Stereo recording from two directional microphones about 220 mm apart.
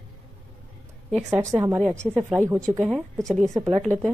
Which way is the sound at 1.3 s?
15° right (ahead or behind).